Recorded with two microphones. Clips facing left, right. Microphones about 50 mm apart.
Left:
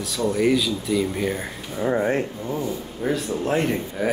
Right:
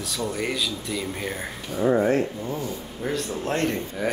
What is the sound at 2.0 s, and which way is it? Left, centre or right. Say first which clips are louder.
Speech: right 1 dB; left.